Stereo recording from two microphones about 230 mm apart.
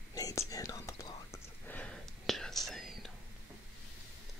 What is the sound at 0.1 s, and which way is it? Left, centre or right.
Whispering, centre.